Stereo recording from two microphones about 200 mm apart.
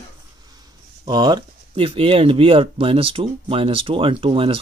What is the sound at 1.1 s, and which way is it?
Speech, 20° right (ahead or behind).